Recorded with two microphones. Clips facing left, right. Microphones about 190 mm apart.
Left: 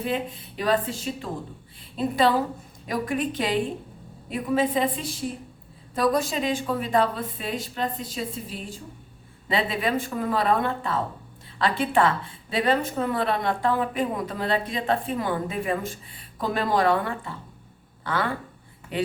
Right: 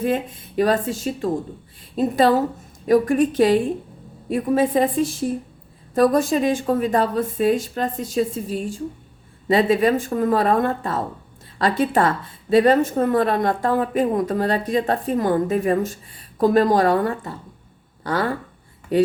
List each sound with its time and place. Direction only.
0.0 s a woman's voice: 45° right (ahead or behind)